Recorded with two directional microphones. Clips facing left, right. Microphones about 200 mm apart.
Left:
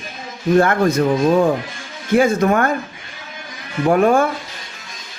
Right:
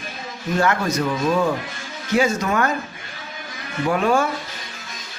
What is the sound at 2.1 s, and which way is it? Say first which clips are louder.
Speech: left 5 dB; 55° left (ahead or behind).